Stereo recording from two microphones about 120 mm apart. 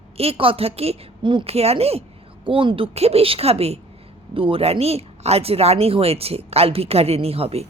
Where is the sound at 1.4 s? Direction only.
60° right (ahead or behind).